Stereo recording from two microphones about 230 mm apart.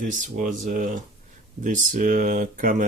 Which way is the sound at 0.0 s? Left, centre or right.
Right.